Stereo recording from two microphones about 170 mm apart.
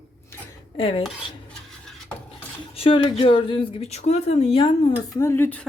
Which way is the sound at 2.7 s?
35° left (ahead or behind).